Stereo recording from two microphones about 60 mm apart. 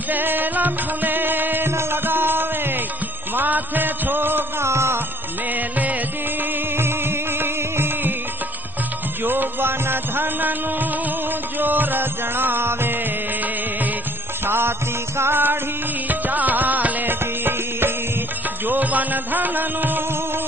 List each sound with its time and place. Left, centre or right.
0.1 s music: right
1.7 s music: right
5.5 s music: right
6.8 s music: right
9.2 s music: right
14.4 s music: right
18.7 s music: right